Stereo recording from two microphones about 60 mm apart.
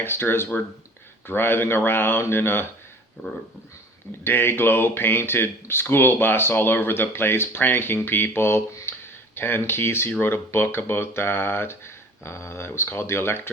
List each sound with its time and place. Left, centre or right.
0.0 s speech: left
4.2 s speech: left